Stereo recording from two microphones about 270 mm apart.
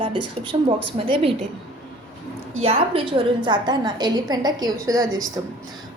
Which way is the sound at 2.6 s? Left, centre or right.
Right.